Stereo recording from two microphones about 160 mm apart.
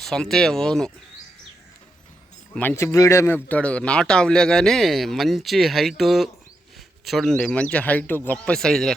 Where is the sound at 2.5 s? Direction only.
10° left (ahead or behind).